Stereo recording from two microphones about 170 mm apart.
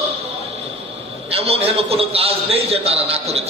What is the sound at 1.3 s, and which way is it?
A man's voice, 35° right (ahead or behind).